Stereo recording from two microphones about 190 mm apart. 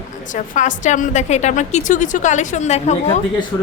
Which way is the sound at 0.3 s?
40° left (ahead or behind).